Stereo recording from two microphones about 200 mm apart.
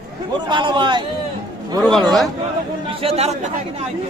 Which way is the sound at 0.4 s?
25° right (ahead or behind).